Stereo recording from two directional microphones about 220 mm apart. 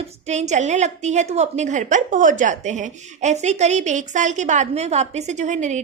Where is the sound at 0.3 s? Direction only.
30° right (ahead or behind).